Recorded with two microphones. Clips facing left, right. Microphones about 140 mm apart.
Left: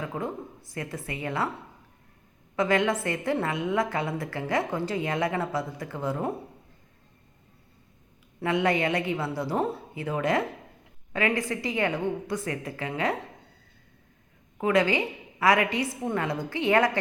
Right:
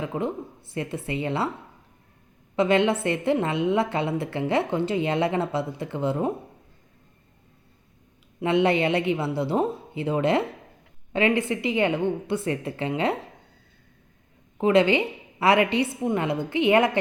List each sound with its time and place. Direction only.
0.0 s a woman's voice: 20° right (ahead or behind)
2.6 s a woman's voice: 25° right (ahead or behind)
8.4 s a woman's voice: 20° right (ahead or behind)
14.6 s a woman's voice: 25° right (ahead or behind)